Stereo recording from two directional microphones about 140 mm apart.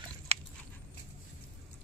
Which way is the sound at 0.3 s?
45° right (ahead or behind).